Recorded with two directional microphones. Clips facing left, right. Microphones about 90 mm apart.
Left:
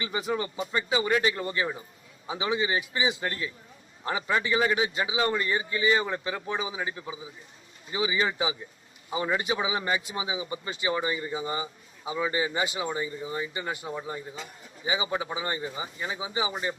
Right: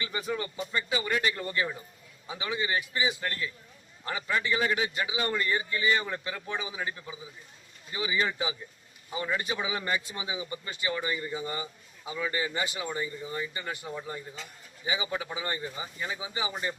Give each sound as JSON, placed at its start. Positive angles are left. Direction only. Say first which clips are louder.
{"t": 0.0, "sound": "speech", "louder": "left 3 dB", "side_deg": 20}